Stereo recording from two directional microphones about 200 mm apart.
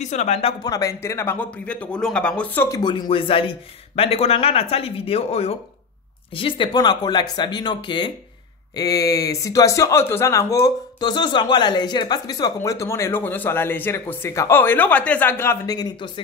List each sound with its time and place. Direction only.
0.0 s speech: 35° left (ahead or behind)
0.7 s speech: 15° left (ahead or behind)
2.8 s speech: 20° left (ahead or behind)